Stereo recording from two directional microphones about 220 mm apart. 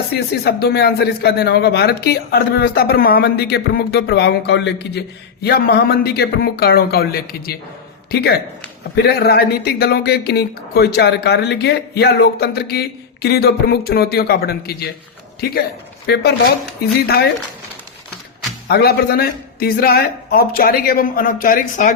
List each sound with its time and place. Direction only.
0.4 s speech: 45° left (ahead or behind)
18.7 s speech: 45° left (ahead or behind)